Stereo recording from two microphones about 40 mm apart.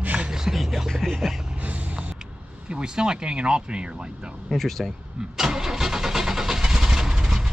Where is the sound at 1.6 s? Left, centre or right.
Right.